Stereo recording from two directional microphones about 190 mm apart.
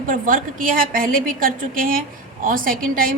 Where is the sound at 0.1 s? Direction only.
45° right (ahead or behind).